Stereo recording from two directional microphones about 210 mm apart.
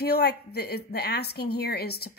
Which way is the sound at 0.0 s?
50° left (ahead or behind).